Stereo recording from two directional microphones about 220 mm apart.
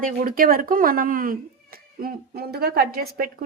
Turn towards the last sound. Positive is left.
turn(degrees=-45)  # may be behind; listen again after turning